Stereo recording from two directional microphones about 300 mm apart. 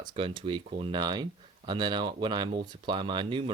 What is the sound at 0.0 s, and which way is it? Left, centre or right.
Speech, centre.